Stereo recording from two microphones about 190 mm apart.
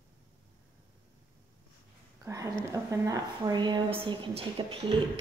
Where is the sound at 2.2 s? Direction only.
15° right (ahead or behind).